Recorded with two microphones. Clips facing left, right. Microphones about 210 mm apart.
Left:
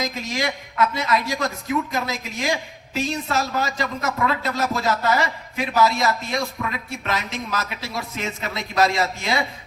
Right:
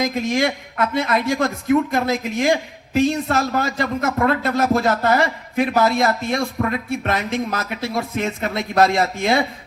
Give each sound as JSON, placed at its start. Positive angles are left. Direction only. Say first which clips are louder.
{"t": 0.0, "sound": "speech", "louder": "right 6 dB", "side_deg": -55}